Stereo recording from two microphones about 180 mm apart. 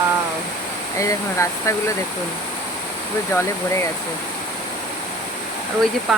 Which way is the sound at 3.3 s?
15° left (ahead or behind).